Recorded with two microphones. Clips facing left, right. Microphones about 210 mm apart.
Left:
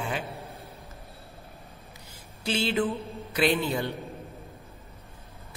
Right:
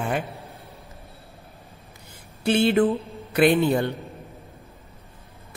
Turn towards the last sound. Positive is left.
turn(degrees=-55)  # may be behind; listen again after turning